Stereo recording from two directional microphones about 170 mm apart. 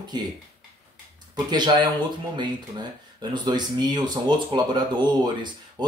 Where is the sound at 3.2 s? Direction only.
25° right (ahead or behind).